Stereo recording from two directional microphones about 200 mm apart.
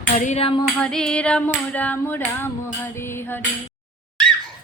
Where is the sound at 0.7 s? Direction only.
5° left (ahead or behind).